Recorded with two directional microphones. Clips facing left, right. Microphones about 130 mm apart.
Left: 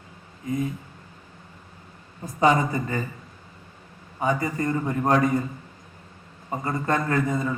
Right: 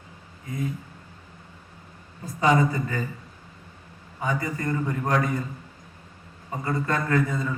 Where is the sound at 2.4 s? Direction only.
25° left (ahead or behind).